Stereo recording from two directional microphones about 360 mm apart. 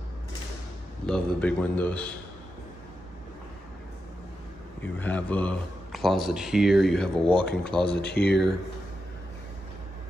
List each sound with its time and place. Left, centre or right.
1.0 s a man's voice: centre
4.8 s a man's voice: centre
7.4 s speech: left